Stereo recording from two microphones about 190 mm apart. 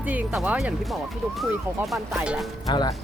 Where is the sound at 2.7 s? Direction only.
20° left (ahead or behind).